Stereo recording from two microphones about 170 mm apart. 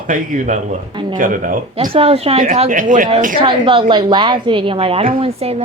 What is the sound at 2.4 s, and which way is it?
Speech, 45° right (ahead or behind).